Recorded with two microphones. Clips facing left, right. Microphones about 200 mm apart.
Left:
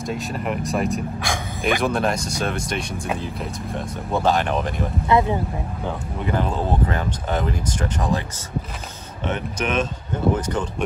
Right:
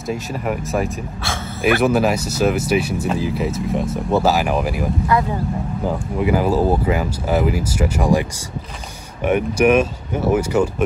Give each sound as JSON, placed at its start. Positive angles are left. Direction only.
{"t": 0.1, "sound": "speech", "side_deg": 0}
{"t": 5.0, "sound": "speech", "side_deg": 20}
{"t": 5.9, "sound": "speech", "side_deg": -5}